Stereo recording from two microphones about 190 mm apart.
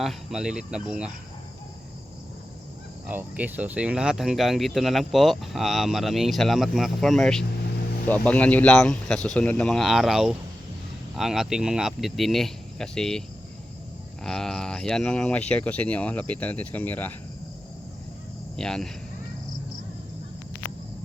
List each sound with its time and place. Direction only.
0.0 s speech: centre (ahead or behind)
3.1 s speech: 10° right (ahead or behind)
14.3 s speech: centre (ahead or behind)
18.5 s speech: 5° left (ahead or behind)